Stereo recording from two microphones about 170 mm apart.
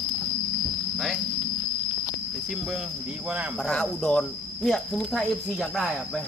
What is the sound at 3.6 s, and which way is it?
Speech, 5° left (ahead or behind).